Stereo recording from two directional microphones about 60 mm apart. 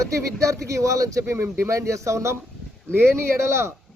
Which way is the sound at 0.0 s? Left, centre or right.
Right.